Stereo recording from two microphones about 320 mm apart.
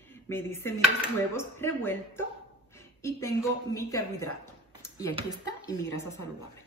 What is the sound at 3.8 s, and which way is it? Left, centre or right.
Speech, centre.